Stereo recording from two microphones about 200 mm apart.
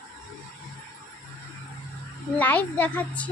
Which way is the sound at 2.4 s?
10° left (ahead or behind).